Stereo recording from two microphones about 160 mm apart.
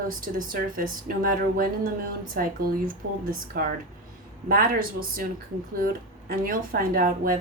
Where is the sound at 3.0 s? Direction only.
90° right.